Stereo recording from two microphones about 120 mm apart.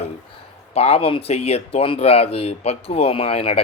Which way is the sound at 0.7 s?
60° left (ahead or behind).